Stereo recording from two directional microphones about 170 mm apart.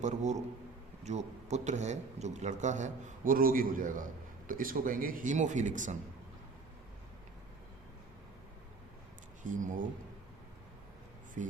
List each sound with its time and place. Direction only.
0.0 s a man's voice: 45° right (ahead or behind)
9.4 s a man's voice: 50° right (ahead or behind)
11.4 s a man's voice: 50° right (ahead or behind)